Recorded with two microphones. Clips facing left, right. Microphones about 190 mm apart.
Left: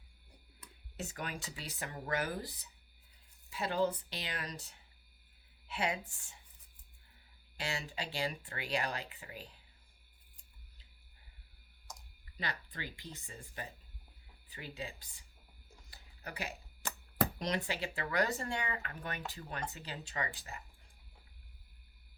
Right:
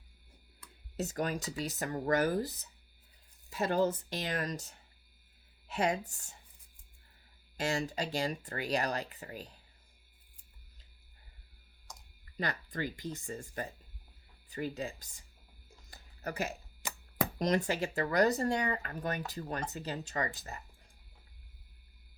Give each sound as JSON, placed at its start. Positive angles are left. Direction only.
{"t": 0.9, "sound": "speech", "side_deg": -40}
{"t": 7.5, "sound": "speech", "side_deg": -45}
{"t": 11.9, "sound": "typing", "side_deg": 0}
{"t": 12.4, "sound": "speech", "side_deg": -45}
{"t": 15.9, "sound": "a sound", "side_deg": -45}
{"t": 16.8, "sound": "chopping", "side_deg": -10}
{"t": 17.3, "sound": "speech", "side_deg": -45}